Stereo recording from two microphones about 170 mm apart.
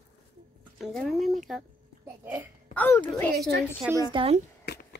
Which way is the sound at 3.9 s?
25° right (ahead or behind).